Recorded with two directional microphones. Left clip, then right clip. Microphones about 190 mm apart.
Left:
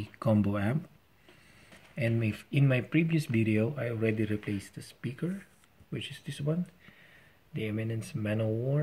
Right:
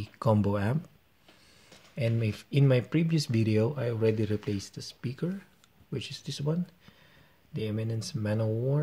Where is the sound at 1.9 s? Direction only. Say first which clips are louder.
Even; 60° right (ahead or behind).